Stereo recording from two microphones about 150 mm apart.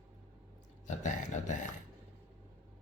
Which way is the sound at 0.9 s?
55° left (ahead or behind).